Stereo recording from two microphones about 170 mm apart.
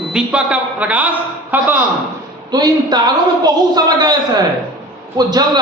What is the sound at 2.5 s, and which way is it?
A man's voice, 25° right (ahead or behind).